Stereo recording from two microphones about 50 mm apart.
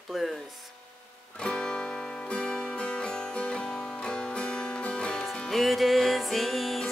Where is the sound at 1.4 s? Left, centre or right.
Centre.